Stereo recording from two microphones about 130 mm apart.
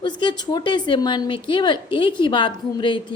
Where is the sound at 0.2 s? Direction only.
35° left (ahead or behind).